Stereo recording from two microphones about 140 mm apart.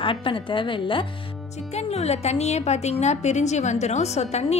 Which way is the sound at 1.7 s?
50° left (ahead or behind).